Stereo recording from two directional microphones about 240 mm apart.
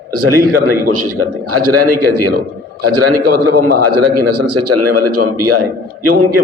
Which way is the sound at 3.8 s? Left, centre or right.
Right.